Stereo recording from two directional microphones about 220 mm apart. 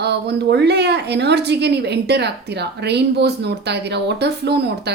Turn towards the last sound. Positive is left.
turn(degrees=-50)  # may be behind; listen again after turning